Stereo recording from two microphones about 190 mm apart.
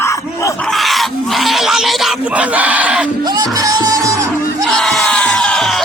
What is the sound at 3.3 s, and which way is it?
Music, 20° right (ahead or behind).